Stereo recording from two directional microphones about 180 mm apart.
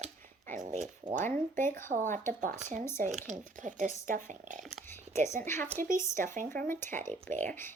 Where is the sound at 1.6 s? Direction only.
15° left (ahead or behind).